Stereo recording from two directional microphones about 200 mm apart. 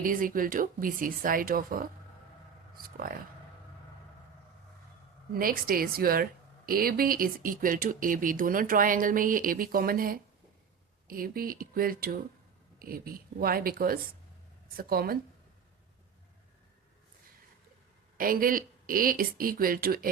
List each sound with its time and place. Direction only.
0.0 s speech: 45° right (ahead or behind)
5.3 s speech: 45° right (ahead or behind)
18.2 s speech: 45° right (ahead or behind)